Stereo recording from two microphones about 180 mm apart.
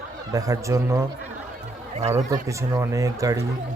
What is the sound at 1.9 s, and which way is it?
Speech, 40° right (ahead or behind).